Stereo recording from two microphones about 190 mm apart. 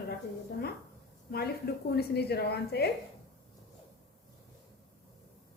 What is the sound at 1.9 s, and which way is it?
Speech, 60° left (ahead or behind).